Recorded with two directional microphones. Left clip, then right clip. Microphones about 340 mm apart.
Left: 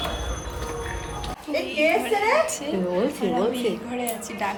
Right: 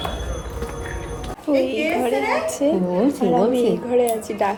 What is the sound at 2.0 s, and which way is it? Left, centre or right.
A woman's voice, centre.